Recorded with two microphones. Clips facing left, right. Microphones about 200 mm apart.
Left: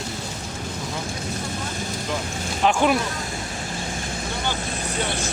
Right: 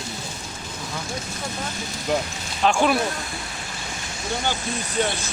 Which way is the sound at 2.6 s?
15° left (ahead or behind).